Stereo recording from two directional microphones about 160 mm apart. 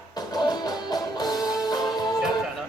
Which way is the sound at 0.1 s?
25° left (ahead or behind).